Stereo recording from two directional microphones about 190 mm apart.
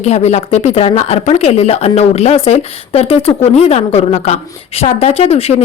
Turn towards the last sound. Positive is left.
turn(degrees=35)  # may be behind; listen again after turning